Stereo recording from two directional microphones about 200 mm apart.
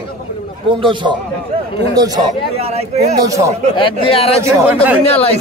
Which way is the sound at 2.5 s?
30° right (ahead or behind).